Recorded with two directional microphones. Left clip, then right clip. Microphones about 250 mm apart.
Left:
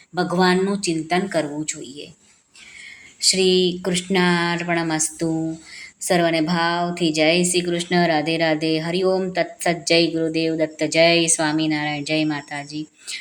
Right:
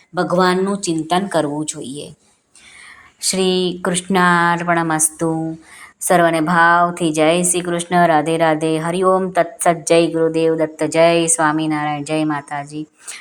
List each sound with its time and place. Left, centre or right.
0.1 s speech: centre
3.2 s a woman's voice: centre